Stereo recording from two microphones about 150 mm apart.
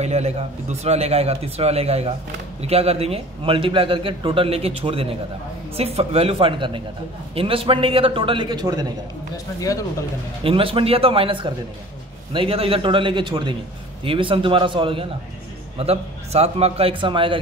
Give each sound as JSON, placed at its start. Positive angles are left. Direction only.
{"t": 0.0, "sound": "a man's voice", "side_deg": -45}
{"t": 10.4, "sound": "a man's voice", "side_deg": -35}